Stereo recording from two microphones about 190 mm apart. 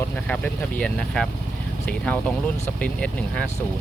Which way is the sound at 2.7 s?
5° left (ahead or behind).